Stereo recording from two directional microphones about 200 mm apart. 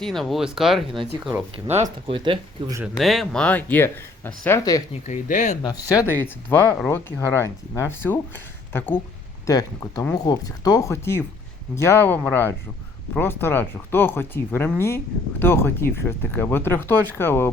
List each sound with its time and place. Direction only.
0.0 s speech: centre (ahead or behind)
2.2 s speech: 20° right (ahead or behind)
2.8 s speech: centre (ahead or behind); by 4.8 s 15° left (ahead or behind)
5.0 s speech: 40° left (ahead or behind)
5.6 s speech: 20° left (ahead or behind)
9.5 s speech: 20° left (ahead or behind)